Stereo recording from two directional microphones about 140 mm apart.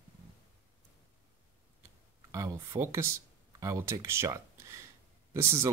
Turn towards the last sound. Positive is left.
turn(degrees=-20)  # may be behind; listen again after turning